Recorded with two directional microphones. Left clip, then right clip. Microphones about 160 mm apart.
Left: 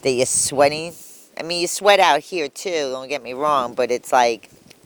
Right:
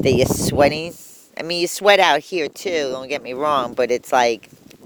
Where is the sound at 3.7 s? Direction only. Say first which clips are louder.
Even; 65° right (ahead or behind).